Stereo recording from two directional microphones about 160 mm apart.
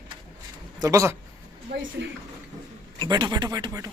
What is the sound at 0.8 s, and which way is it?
Speech, 20° right (ahead or behind).